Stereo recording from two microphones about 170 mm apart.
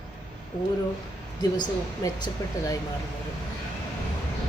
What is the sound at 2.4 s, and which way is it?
Speech, 20° left (ahead or behind).